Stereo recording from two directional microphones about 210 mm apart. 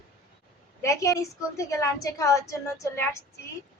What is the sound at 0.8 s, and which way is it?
A woman's voice, 15° left (ahead or behind).